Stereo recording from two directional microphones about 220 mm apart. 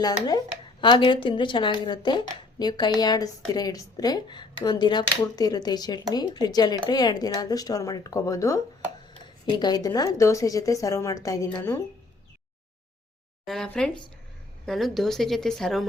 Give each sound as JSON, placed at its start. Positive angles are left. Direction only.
{"t": 0.0, "sound": "a woman's voice", "side_deg": 15}
{"t": 13.4, "sound": "speech", "side_deg": 0}